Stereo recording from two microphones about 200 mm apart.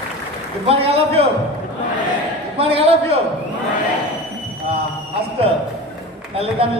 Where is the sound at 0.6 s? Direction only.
30° right (ahead or behind).